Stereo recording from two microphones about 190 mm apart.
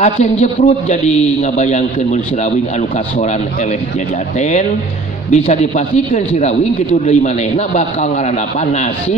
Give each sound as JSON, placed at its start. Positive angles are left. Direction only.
{"t": 0.0, "sound": "a man's voice", "side_deg": 35}
{"t": 4.4, "sound": "a man's voice", "side_deg": 40}